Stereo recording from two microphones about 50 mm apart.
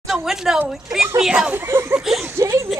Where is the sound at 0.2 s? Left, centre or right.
Centre.